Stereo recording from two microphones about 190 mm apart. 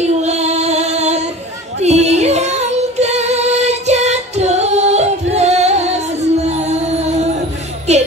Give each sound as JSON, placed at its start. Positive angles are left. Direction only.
{"t": 0.0, "sound": "female singing", "side_deg": -35}
{"t": 1.8, "sound": "music", "side_deg": -35}